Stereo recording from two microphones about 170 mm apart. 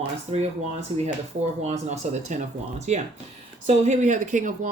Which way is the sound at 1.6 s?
40° right (ahead or behind).